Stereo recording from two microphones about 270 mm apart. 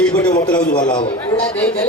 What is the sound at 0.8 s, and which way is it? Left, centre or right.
Speech, centre.